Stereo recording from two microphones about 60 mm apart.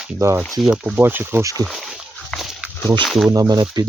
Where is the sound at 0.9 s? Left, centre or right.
Right.